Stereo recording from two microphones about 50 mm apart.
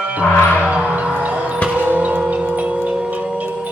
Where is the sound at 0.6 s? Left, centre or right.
Right.